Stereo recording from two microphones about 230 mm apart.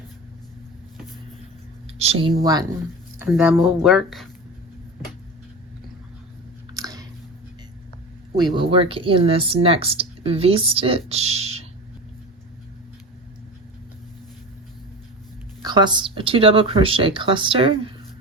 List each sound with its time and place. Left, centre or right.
2.0 s speech: right
3.2 s speech: centre
6.7 s chewing: centre
8.4 s speech: right
15.6 s speech: centre